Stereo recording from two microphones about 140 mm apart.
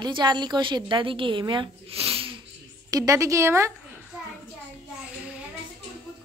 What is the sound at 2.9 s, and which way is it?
Speech, 25° right (ahead or behind).